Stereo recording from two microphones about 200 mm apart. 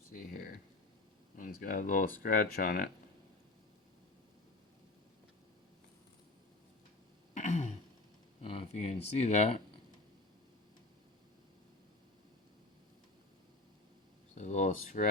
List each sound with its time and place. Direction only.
0.1 s a sound: 40° left (ahead or behind)
1.4 s speech: 45° left (ahead or behind)
7.3 s throat clearing: 35° left (ahead or behind)
8.4 s speech: 30° left (ahead or behind)
14.3 s speech: 35° left (ahead or behind)